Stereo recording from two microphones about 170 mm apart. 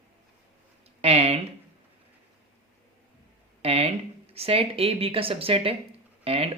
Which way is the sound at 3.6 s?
35° right (ahead or behind).